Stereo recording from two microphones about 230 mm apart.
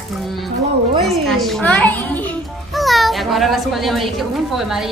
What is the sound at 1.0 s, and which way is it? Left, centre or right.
A woman's voice, centre.